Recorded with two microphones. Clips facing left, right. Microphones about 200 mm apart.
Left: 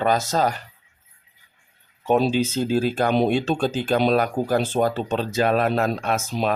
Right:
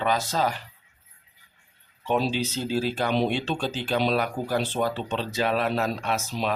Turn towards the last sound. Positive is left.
turn(degrees=50)  # may be behind; listen again after turning